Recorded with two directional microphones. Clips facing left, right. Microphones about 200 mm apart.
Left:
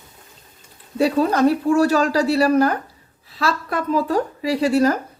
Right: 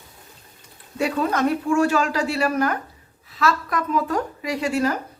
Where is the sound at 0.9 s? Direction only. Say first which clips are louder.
Left 5 dB; 35° left (ahead or behind).